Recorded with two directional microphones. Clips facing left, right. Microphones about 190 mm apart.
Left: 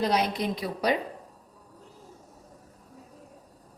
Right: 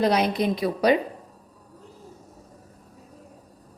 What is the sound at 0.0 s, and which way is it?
Speech, 70° right (ahead or behind).